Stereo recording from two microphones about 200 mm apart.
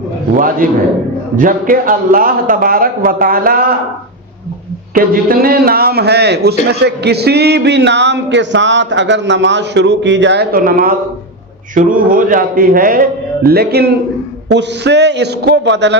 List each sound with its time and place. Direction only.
0.3 s a man's voice: 45° right (ahead or behind)
4.9 s a man's voice: 45° right (ahead or behind)